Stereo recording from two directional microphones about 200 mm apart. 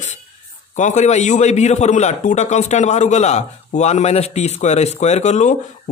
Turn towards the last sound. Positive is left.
turn(degrees=35)  # may be behind; listen again after turning